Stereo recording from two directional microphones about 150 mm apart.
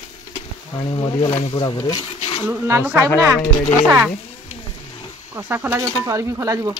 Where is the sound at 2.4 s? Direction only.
15° right (ahead or behind).